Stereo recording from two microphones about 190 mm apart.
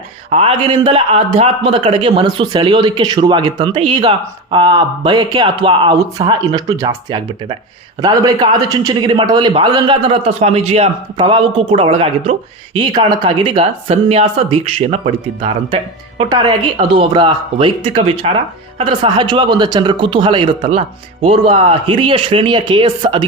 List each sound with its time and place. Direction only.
0.3 s a man's voice: 30° right (ahead or behind)